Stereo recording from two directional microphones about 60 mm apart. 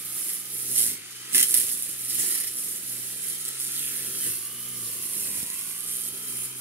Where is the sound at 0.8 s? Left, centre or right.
Right.